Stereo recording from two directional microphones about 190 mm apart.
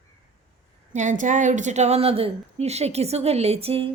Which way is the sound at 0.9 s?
40° right (ahead or behind).